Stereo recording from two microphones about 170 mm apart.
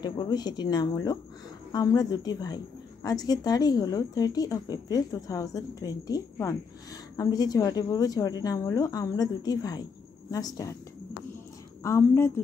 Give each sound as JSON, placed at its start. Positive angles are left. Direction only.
{"t": 0.0, "sound": "a woman's voice", "side_deg": 25}
{"t": 11.8, "sound": "a woman's voice", "side_deg": 15}